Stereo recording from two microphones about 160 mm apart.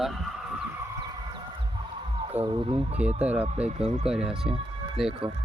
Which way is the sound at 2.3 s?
10° right (ahead or behind).